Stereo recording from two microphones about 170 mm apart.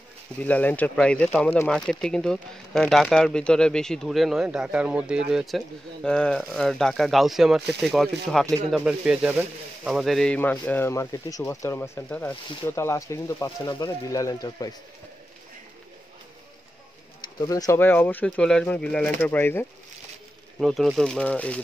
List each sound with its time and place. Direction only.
0.4 s speech: 10° left (ahead or behind)
17.2 s speech: 20° left (ahead or behind)
20.5 s speech: centre (ahead or behind)